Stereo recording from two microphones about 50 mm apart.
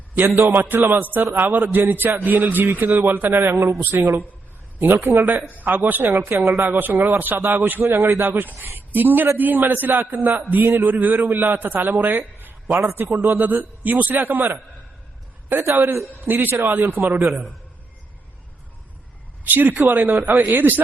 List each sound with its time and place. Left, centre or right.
0.2 s a man's voice: right
3.3 s a man's voice: right
5.6 s a man's voice: right
6.1 s a man's voice: right
19.5 s a man's voice: right